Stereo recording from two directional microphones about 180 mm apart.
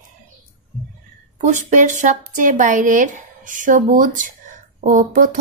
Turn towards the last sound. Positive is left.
turn(degrees=-45)  # may be behind; listen again after turning